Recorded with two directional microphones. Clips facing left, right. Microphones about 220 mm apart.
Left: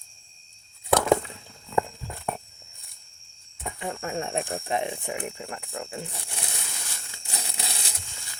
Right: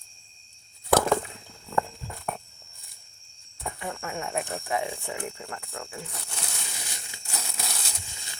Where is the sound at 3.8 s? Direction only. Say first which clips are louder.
Left 4 dB; 30° left (ahead or behind); by 6.4 s 15° left (ahead or behind).